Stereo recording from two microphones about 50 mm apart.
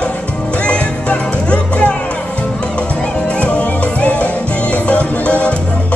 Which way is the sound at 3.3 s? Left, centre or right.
Left.